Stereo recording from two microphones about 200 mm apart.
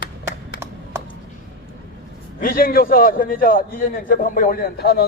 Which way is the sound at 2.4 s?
45° left (ahead or behind).